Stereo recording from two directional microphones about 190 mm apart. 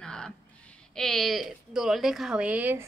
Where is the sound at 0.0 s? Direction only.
5° left (ahead or behind).